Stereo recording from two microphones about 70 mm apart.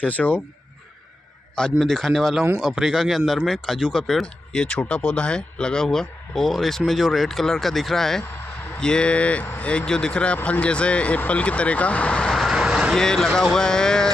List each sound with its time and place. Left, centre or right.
0.0 s speech: left
1.5 s speech: centre
2.6 s speech: centre
12.3 s vehicle: centre
12.5 s vehicle: centre
12.9 s speech: centre